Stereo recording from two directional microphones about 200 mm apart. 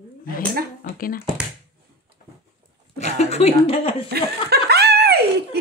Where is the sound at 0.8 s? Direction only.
45° left (ahead or behind).